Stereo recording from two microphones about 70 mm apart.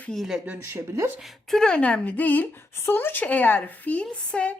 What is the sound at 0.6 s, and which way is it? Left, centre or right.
Speech, right.